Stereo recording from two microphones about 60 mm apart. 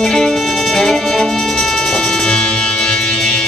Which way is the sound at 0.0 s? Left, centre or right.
Centre.